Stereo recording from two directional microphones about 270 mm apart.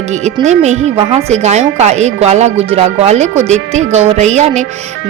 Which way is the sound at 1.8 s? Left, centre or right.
Right.